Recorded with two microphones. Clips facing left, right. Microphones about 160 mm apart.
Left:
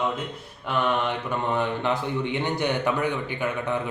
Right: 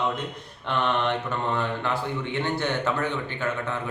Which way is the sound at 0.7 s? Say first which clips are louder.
Even; 5° left (ahead or behind).